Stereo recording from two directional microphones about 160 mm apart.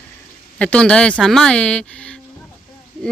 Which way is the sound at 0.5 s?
5° left (ahead or behind).